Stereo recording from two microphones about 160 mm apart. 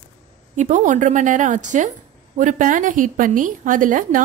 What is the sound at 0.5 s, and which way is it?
A woman's voice, 50° right (ahead or behind).